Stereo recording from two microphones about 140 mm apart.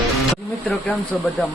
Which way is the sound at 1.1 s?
Centre (ahead or behind).